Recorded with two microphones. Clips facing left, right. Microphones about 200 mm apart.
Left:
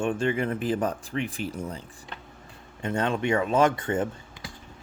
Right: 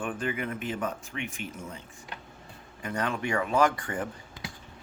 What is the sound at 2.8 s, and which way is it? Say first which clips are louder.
Speech: left 5 dB; 25° left (ahead or behind).